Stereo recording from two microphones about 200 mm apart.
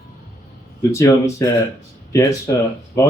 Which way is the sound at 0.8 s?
15° left (ahead or behind).